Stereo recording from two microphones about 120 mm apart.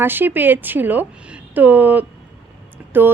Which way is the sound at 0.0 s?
15° right (ahead or behind).